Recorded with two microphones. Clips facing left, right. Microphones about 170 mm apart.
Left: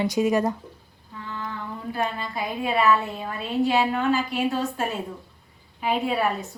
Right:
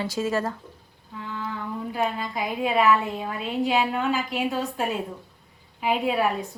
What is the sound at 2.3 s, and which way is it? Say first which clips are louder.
A woman's voice: right 1 dB; 15° right (ahead or behind).